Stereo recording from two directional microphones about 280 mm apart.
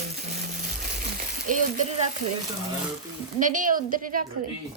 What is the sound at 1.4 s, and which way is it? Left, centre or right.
Speech, right.